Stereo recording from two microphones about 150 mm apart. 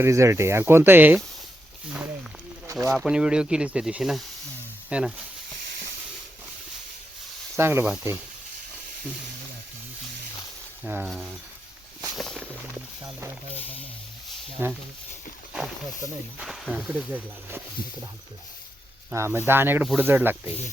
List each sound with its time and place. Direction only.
0.0 s speech: 20° right (ahead or behind)
2.7 s speech: centre (ahead or behind)
7.6 s speech: 15° right (ahead or behind)
10.8 s speech: 10° right (ahead or behind)
11.1 s speech: centre (ahead or behind)
13.0 s speech: 20° right (ahead or behind)
14.6 s speech: 15° right (ahead or behind)
15.5 s speech: centre (ahead or behind)
19.1 s speech: 15° right (ahead or behind)